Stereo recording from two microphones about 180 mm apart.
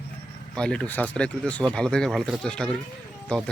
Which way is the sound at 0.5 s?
5° left (ahead or behind).